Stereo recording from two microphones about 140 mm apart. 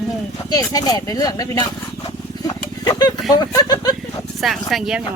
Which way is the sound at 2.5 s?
30° left (ahead or behind).